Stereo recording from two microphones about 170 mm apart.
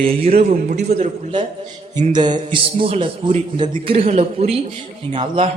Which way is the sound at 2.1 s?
25° right (ahead or behind).